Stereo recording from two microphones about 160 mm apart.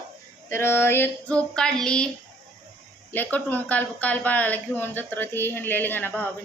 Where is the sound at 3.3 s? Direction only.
10° left (ahead or behind).